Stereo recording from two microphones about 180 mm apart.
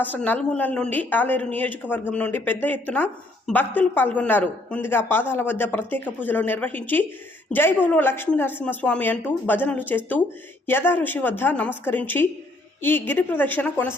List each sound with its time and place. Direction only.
0.0 s a woman's voice: 10° left (ahead or behind)